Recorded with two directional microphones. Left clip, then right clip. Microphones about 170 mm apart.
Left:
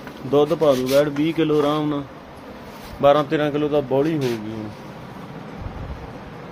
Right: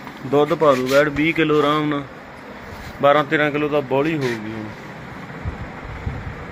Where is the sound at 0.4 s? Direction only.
Centre (ahead or behind).